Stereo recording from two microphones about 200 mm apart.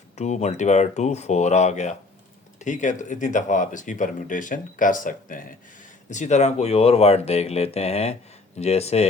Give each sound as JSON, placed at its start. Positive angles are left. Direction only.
{"t": 0.2, "sound": "speech", "side_deg": 35}